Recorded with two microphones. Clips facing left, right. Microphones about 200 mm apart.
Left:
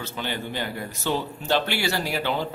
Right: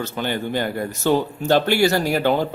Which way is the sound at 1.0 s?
45° right (ahead or behind).